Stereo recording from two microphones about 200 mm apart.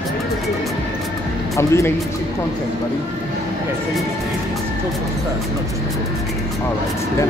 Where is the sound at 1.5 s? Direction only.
15° left (ahead or behind).